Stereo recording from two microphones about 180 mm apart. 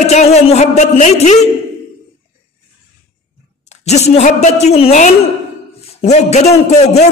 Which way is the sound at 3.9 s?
35° left (ahead or behind).